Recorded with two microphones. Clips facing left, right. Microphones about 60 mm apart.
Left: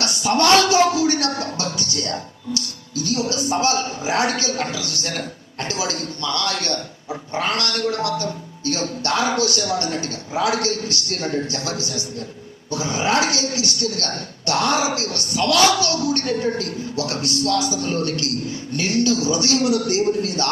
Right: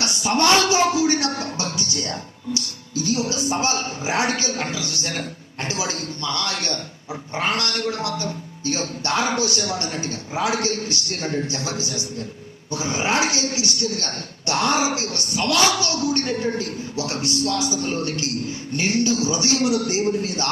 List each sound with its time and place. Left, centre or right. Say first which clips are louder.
0.0 s a man's voice: left 2 dB; right